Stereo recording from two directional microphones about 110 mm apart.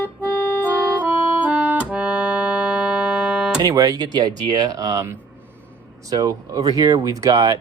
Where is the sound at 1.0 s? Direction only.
15° right (ahead or behind).